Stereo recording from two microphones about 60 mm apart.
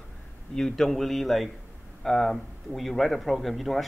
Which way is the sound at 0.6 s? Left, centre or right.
Centre.